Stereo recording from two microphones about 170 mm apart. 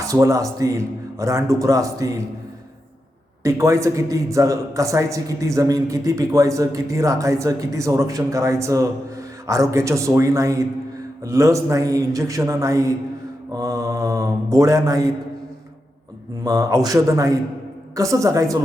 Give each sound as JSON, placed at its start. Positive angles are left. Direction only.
{"t": 0.1, "sound": "a man's voice", "side_deg": -20}
{"t": 3.4, "sound": "a man's voice", "side_deg": -20}
{"t": 16.4, "sound": "a man's voice", "side_deg": -20}